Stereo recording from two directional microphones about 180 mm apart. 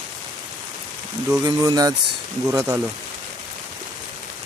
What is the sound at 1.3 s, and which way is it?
Speech, 20° right (ahead or behind).